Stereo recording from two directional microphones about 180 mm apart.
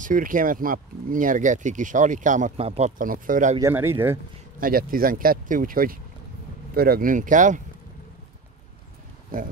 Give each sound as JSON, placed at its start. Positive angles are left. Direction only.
{"t": 0.0, "sound": "speech", "side_deg": -50}
{"t": 3.0, "sound": "speech", "side_deg": -50}
{"t": 3.5, "sound": "speech", "side_deg": -15}
{"t": 4.6, "sound": "speech", "side_deg": -55}